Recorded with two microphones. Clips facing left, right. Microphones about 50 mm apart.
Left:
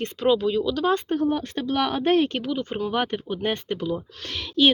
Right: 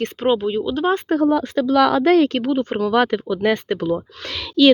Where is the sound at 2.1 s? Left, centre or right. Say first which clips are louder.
Right 6 dB; right.